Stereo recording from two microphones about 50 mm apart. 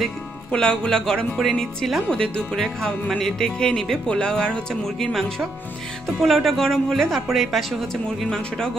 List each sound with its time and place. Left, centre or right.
0.5 s speech: centre
6.2 s speech: centre